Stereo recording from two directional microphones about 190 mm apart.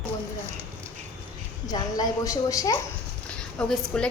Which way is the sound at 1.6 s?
20° left (ahead or behind).